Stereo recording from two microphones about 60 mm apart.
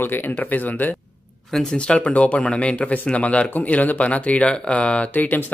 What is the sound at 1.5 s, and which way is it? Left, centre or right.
Speech, centre.